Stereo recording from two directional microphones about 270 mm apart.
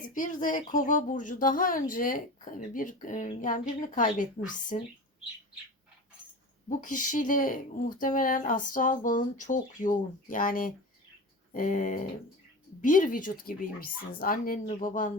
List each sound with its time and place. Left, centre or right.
0.4 s speech: left
6.7 s speech: left